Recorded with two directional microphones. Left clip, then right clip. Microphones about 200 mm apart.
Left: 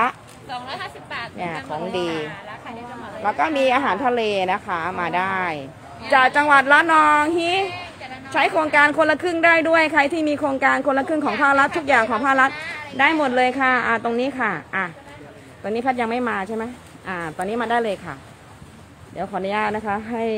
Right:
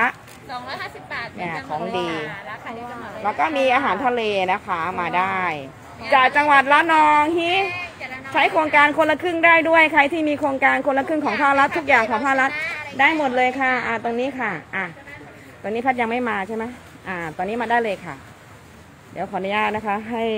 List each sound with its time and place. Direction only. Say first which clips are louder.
0.0 s a sound: even; 10° left (ahead or behind)
1.8 s speech: even; 20° right (ahead or behind)
3.3 s a woman's voice: even; 10° left (ahead or behind)
7.7 s a sound: right 3 dB; 40° right (ahead or behind)
8.3 s a woman's voice: right 1 dB; 10° left (ahead or behind)
12.5 s cat: right 4 dB; 50° right (ahead or behind)
12.9 s a woman's voice: even; 15° left (ahead or behind)
19.1 s a woman's voice: right 1 dB; 10° left (ahead or behind)